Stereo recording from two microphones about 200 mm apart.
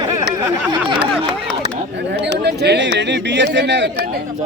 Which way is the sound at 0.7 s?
25° right (ahead or behind).